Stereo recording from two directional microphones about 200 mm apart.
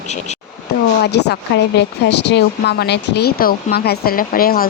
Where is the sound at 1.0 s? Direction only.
55° left (ahead or behind).